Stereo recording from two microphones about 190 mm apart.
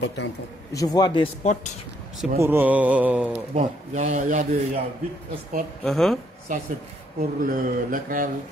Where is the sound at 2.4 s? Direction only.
10° right (ahead or behind).